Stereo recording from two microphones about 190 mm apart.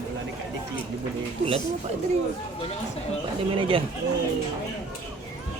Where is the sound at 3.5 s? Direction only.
30° right (ahead or behind).